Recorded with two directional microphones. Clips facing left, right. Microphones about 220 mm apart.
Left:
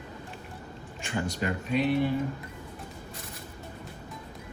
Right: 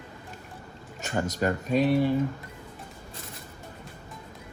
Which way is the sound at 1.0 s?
45° right (ahead or behind).